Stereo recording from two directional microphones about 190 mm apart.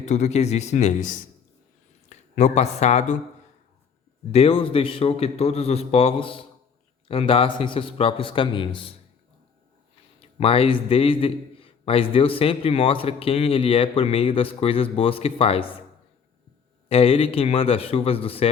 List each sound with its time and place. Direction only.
0.0 s speech: 35° left (ahead or behind)
4.3 s a man's voice: 30° left (ahead or behind)
10.2 s a man's voice: 30° left (ahead or behind)
16.9 s speech: 30° left (ahead or behind)